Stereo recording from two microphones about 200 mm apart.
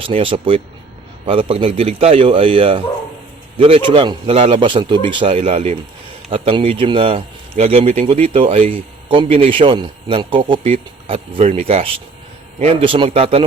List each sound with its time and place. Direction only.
0.0 s speech: 25° right (ahead or behind)